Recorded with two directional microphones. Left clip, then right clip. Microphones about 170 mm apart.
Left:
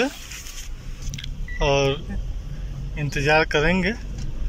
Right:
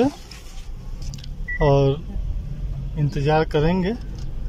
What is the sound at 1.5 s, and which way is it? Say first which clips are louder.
Speech: right 2 dB; 30° right (ahead or behind).